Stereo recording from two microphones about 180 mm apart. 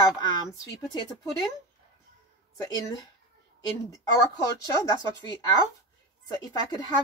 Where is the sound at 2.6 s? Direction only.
20° left (ahead or behind).